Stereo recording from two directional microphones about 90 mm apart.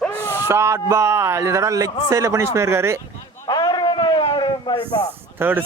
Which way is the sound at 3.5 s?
50° left (ahead or behind).